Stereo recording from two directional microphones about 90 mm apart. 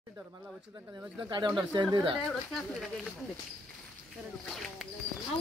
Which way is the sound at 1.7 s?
50° right (ahead or behind).